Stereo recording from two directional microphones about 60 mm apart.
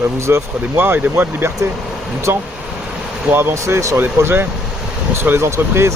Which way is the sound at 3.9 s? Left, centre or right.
Right.